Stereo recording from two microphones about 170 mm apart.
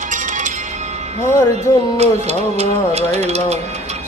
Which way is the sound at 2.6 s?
40° right (ahead or behind).